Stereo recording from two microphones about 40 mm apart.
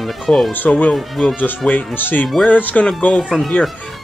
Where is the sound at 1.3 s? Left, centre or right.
Left.